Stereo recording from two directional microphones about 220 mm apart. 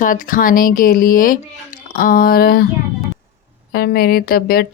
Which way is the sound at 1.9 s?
40° left (ahead or behind).